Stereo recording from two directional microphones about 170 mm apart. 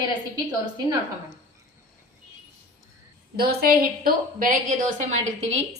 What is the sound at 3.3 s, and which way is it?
A woman's voice, 65° right (ahead or behind).